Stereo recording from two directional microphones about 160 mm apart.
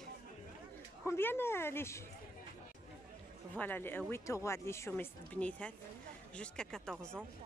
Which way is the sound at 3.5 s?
10° left (ahead or behind).